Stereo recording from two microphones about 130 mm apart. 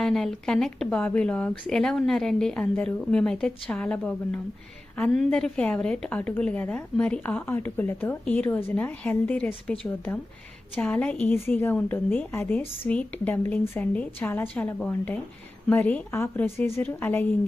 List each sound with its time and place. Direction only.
0.0 s a woman's voice: 5° left (ahead or behind)